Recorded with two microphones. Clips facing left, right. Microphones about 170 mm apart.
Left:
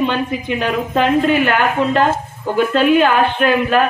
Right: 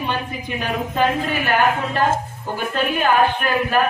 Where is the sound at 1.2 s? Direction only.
60° left (ahead or behind).